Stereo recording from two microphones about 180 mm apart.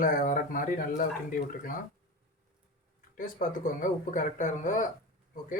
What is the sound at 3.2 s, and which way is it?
Speech, 45° left (ahead or behind).